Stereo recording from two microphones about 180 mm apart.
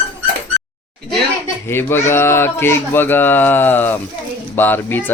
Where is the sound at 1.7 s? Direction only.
15° left (ahead or behind).